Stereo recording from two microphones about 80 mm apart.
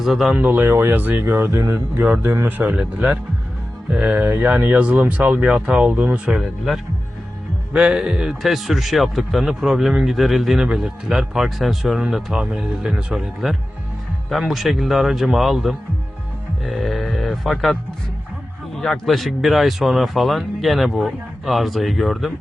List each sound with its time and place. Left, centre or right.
0.0 s speech: centre
0.3 s speech: centre
7.7 s speech: centre
18.8 s speech: centre